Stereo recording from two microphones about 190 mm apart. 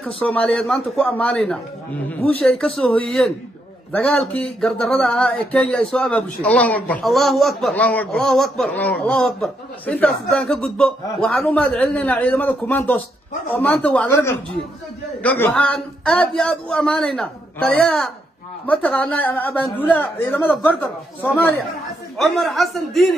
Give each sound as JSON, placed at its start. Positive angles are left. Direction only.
{"t": 0.0, "sound": "a man's voice", "side_deg": 5}